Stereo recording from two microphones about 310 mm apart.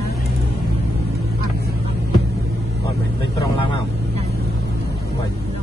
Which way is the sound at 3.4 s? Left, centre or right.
Centre.